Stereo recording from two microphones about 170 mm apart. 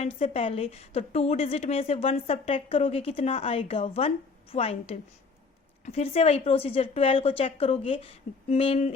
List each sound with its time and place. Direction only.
0.2 s a woman's voice: 35° left (ahead or behind)